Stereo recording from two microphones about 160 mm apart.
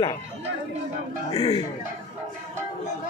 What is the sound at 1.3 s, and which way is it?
Speech, 30° left (ahead or behind).